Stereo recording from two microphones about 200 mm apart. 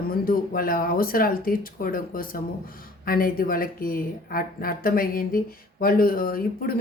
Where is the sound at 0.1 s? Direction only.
45° left (ahead or behind).